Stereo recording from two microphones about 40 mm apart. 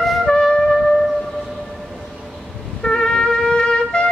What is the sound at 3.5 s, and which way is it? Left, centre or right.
Music, left.